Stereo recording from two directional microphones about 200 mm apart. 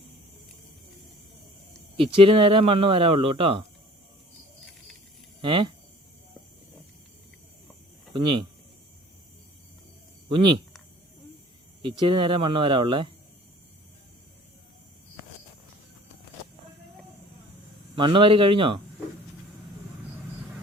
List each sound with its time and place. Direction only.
2.0 s speech: 25° right (ahead or behind)
5.4 s speech: 25° right (ahead or behind)
8.1 s speech: 25° right (ahead or behind)
10.2 s speech: 25° right (ahead or behind)
11.8 s speech: 25° right (ahead or behind)
17.9 s speech: 25° right (ahead or behind)